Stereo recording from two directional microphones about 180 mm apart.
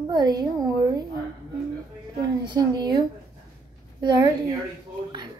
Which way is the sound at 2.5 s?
20° right (ahead or behind).